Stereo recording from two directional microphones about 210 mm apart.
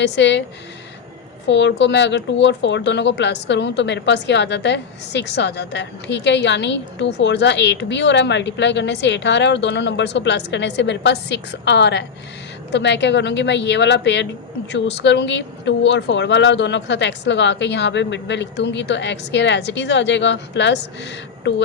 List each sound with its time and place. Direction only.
0.0 s speech: 55° left (ahead or behind)
1.5 s speech: 55° left (ahead or behind)